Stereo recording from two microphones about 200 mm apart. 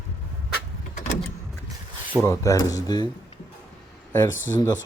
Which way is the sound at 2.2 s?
15° left (ahead or behind).